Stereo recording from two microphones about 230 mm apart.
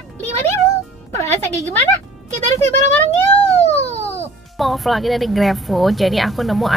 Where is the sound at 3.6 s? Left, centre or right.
Left.